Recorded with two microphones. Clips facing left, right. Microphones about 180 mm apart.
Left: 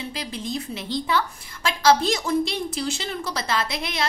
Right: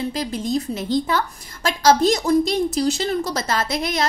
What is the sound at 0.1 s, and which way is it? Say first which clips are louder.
A woman's voice: right 7 dB; 45° right (ahead or behind).